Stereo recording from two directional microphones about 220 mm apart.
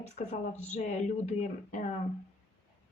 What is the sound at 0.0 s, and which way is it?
Speech, 30° left (ahead or behind).